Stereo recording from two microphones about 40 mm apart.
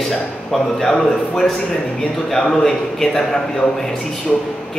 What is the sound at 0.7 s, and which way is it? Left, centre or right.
A man's voice, centre.